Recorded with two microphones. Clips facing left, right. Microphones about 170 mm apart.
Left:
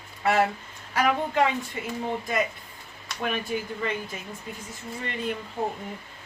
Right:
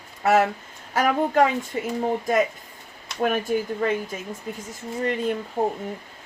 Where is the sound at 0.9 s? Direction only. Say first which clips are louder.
Right 4 dB; 45° right (ahead or behind).